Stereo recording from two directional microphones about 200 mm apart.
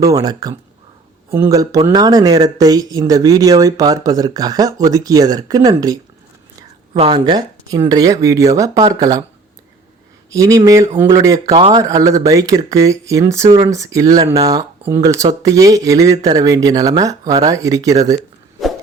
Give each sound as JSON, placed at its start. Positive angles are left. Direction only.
{"t": 0.0, "sound": "speech", "side_deg": -20}
{"t": 10.3, "sound": "speech", "side_deg": -15}